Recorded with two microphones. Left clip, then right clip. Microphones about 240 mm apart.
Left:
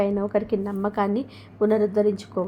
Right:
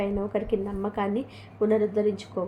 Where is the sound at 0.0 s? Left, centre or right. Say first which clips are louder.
Left 5 dB; left.